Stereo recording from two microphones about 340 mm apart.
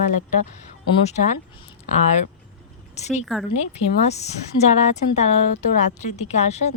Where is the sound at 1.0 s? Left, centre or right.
Left.